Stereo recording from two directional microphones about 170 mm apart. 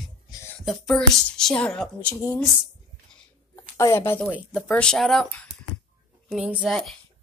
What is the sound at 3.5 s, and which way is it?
Speech, 15° left (ahead or behind).